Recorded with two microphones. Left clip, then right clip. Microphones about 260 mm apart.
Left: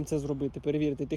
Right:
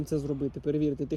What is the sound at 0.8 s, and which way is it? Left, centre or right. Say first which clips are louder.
Speech: right 1 dB; centre.